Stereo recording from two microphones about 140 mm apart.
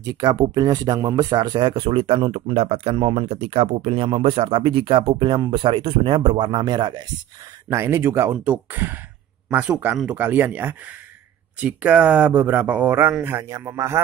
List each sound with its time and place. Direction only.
0.0 s speech: 30° right (ahead or behind)
7.7 s a man's voice: 20° right (ahead or behind)